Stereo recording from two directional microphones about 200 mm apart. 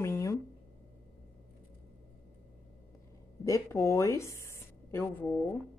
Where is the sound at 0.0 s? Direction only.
15° left (ahead or behind).